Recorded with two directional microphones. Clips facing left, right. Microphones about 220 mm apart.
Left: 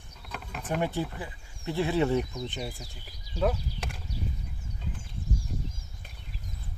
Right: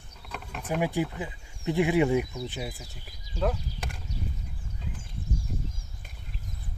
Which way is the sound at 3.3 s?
5° left (ahead or behind).